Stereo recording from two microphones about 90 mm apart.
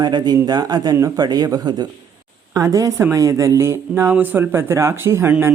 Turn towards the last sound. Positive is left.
turn(degrees=-30)  # may be behind; listen again after turning